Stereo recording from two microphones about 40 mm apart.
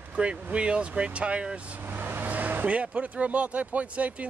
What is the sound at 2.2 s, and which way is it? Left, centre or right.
Vehicle, right.